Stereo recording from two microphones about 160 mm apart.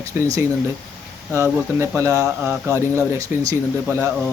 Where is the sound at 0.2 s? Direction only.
20° right (ahead or behind).